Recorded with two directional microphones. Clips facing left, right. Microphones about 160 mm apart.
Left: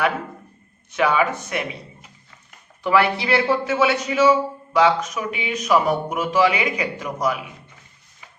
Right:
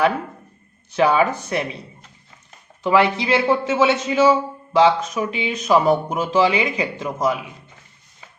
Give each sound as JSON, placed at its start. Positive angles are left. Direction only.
{"t": 0.9, "sound": "speech", "side_deg": -30}
{"t": 2.8, "sound": "a man's voice", "side_deg": -20}